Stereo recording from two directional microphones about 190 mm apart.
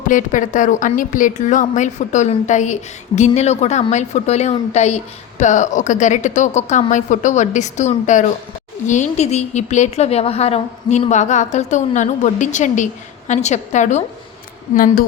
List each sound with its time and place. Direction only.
0.1 s a woman's voice: 40° left (ahead or behind)